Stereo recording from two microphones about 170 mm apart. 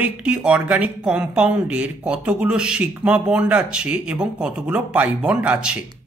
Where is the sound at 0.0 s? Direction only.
5° right (ahead or behind).